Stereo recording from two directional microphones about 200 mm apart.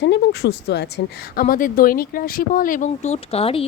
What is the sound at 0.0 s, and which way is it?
Speech, 60° left (ahead or behind).